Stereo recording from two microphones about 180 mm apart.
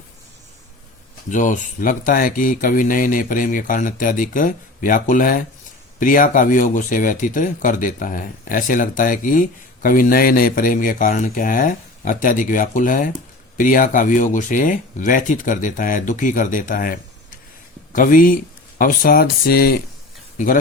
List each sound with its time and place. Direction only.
1.3 s speech: 45° left (ahead or behind)
20.4 s speech: 45° left (ahead or behind)